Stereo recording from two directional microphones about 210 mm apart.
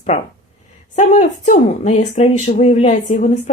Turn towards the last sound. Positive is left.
turn(degrees=35)  # may be behind; listen again after turning